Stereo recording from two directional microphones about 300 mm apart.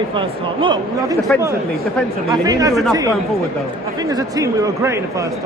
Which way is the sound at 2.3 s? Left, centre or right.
Centre.